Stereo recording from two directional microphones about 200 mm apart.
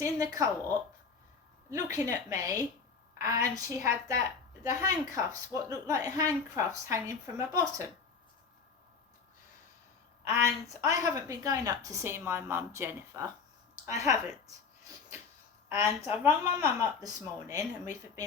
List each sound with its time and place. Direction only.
0.0 s a woman's voice: 15° right (ahead or behind)
1.7 s a woman's voice: 15° right (ahead or behind)
10.2 s a woman's voice: 15° right (ahead or behind)
15.7 s a woman's voice: 15° right (ahead or behind)